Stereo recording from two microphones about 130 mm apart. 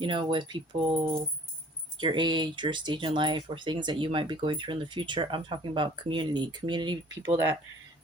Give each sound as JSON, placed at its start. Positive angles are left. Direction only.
{"t": 0.0, "sound": "speech", "side_deg": -40}